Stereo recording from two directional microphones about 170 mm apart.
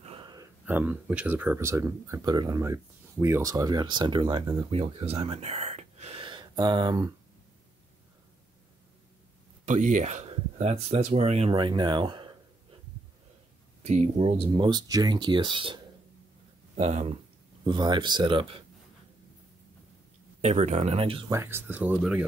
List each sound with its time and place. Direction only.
0.0 s a sound: 30° right (ahead or behind)
0.7 s speech: 10° right (ahead or behind)
9.7 s speech: 45° right (ahead or behind); by 12.3 s 25° right (ahead or behind)
13.8 s speech: 40° right (ahead or behind)
16.7 s speech: 40° right (ahead or behind)
17.6 s speech: 25° right (ahead or behind)
20.4 s speech: 40° right (ahead or behind)
21.3 s speech: 15° right (ahead or behind)